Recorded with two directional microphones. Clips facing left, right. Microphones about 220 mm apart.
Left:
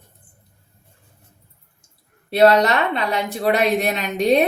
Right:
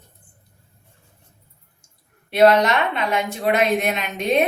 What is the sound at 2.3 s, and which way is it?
Speech, 35° left (ahead or behind).